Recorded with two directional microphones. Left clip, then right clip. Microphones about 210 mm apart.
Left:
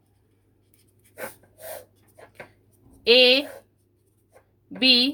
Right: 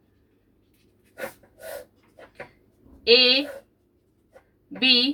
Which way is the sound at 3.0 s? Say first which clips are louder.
Left 1 dB; 55° left (ahead or behind).